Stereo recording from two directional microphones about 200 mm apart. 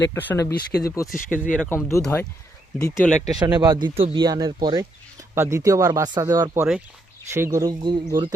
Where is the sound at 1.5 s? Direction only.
10° left (ahead or behind).